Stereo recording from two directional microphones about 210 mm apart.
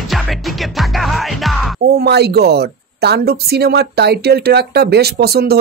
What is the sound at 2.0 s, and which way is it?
Speech, 50° right (ahead or behind).